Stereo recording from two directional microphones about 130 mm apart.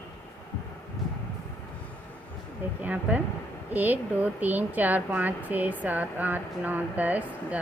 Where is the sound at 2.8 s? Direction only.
10° right (ahead or behind).